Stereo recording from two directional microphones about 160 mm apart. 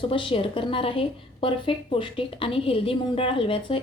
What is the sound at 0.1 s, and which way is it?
A woman's voice, 35° left (ahead or behind).